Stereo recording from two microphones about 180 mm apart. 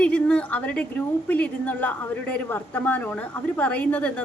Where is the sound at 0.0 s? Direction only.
5° left (ahead or behind).